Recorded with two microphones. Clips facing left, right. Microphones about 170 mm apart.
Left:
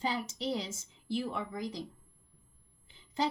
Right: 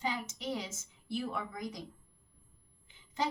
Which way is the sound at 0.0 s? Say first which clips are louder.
Left 3 dB; 35° left (ahead or behind).